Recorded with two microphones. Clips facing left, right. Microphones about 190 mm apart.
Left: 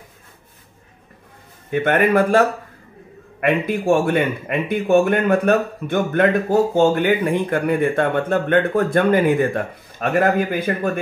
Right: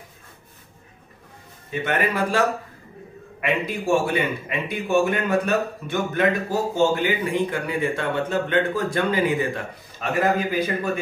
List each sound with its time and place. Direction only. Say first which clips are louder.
1.7 s a man's voice: left 7 dB; 55° left (ahead or behind)